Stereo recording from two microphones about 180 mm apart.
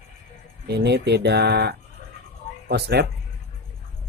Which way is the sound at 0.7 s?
70° right (ahead or behind).